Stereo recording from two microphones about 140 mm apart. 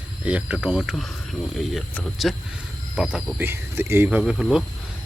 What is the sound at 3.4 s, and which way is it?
Speech, 15° right (ahead or behind).